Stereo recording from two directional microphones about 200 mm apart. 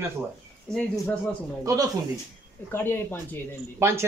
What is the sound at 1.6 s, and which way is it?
Speech, 15° right (ahead or behind).